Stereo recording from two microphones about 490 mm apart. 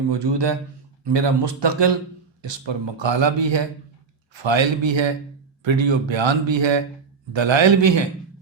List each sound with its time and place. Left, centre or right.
0.1 s speech: right